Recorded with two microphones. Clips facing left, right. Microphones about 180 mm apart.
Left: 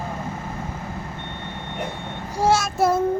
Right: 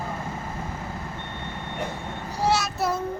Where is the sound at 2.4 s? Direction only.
45° left (ahead or behind).